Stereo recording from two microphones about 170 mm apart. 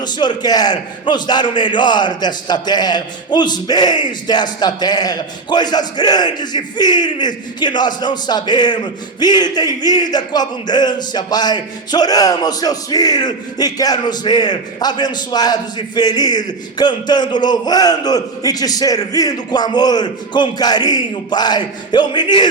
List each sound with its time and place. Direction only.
0.0 s a man's voice: 25° left (ahead or behind)